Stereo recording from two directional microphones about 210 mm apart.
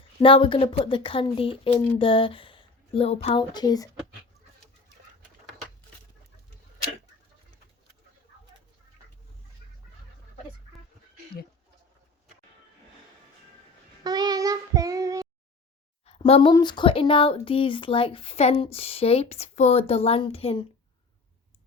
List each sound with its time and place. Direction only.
0.2 s speech: 25° left (ahead or behind)
14.0 s child singing: 20° right (ahead or behind)
16.0 s speech: 25° left (ahead or behind)